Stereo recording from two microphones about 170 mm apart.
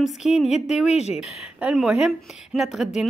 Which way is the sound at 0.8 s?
40° left (ahead or behind).